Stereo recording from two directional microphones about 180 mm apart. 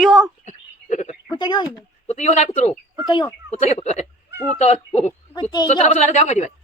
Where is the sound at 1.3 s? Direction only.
25° left (ahead or behind).